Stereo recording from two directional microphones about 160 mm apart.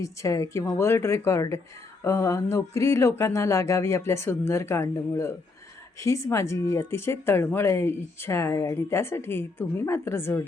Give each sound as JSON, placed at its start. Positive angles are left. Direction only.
{"t": 0.0, "sound": "speech", "side_deg": 20}